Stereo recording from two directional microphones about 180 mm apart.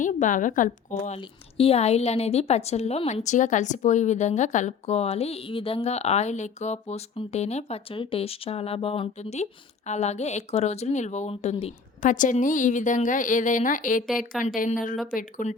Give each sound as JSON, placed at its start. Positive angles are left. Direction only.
{"t": 0.0, "sound": "a woman's voice", "side_deg": 45}
{"t": 12.0, "sound": "a woman's voice", "side_deg": 45}